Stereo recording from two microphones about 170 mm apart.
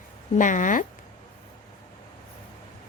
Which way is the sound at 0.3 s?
50° left (ahead or behind).